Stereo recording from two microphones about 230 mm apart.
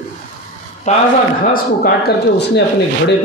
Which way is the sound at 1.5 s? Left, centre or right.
Left.